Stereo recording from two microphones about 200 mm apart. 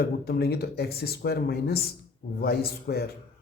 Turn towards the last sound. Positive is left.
turn(degrees=50)  # may be behind; listen again after turning